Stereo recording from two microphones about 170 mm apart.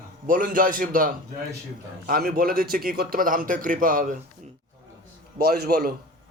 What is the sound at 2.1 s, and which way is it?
A man's voice, 65° right (ahead or behind).